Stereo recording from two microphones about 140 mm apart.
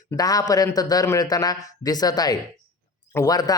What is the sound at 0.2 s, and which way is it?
Speech, 25° left (ahead or behind).